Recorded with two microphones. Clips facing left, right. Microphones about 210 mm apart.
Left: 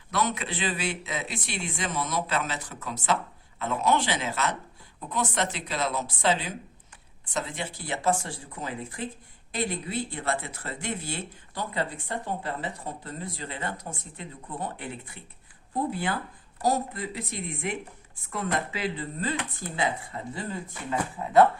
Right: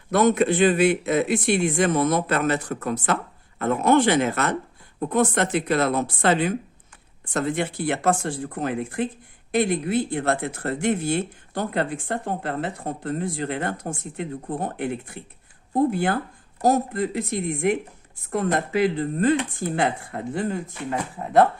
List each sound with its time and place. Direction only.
0.1 s speech: 50° right (ahead or behind)
9.6 s speech: 65° right (ahead or behind)
10.3 s speech: 45° right (ahead or behind)
10.6 s speech: 65° right (ahead or behind)
13.2 s speech: 70° right (ahead or behind); by 14.8 s 45° right (ahead or behind)
14.8 s speech: 70° right (ahead or behind)
15.7 s speech: 45° right (ahead or behind); by 17.7 s 65° right (ahead or behind)
18.3 s speech: 50° right (ahead or behind)